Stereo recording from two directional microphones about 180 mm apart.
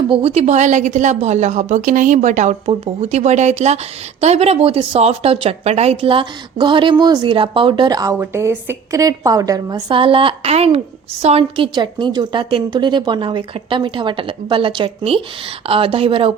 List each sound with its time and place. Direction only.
0.1 s a woman's voice: 35° right (ahead or behind)
2.6 s a woman's voice: 30° right (ahead or behind)